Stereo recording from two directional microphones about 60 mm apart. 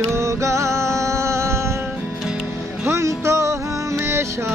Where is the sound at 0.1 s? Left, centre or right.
Right.